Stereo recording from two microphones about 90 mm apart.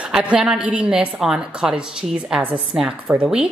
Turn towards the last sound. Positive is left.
turn(degrees=-10)  # may be behind; listen again after turning